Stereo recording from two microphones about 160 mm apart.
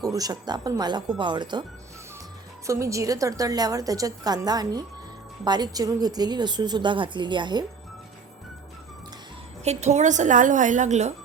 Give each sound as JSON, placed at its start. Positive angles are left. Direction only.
{"t": 0.0, "sound": "a woman's voice", "side_deg": -25}
{"t": 2.6, "sound": "a woman's voice", "side_deg": -20}
{"t": 9.6, "sound": "a woman's voice", "side_deg": -45}